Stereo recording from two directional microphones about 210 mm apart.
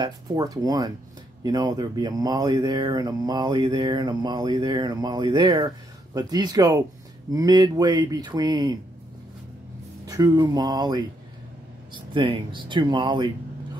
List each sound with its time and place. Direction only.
0.0 s speech: 15° right (ahead or behind)
10.0 s speech: 15° right (ahead or behind)